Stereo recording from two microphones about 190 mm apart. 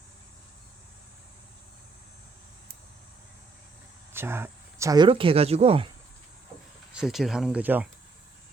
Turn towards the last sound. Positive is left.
turn(degrees=-10)  # may be behind; listen again after turning